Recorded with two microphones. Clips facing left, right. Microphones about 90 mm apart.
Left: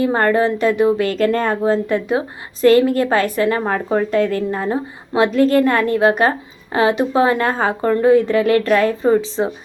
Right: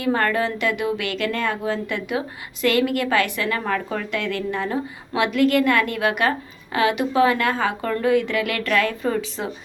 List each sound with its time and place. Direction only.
0.0 s speech: 30° left (ahead or behind)